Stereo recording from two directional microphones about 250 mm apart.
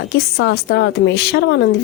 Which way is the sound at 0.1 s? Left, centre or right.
Left.